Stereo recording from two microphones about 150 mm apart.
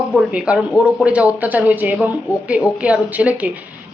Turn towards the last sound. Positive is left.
turn(degrees=-10)  # may be behind; listen again after turning